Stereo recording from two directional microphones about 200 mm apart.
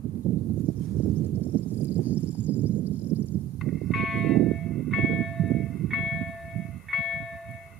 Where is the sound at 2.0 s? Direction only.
5° right (ahead or behind).